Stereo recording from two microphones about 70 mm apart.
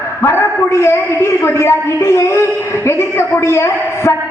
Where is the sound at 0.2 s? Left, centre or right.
Left.